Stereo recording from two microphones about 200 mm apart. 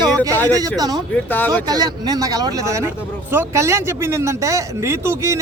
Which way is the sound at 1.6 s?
20° right (ahead or behind).